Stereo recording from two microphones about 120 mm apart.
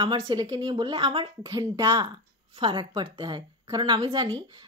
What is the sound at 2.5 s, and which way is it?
A woman's voice, 45° right (ahead or behind).